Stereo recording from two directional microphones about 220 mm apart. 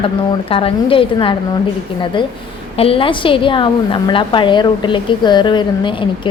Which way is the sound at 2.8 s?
25° left (ahead or behind).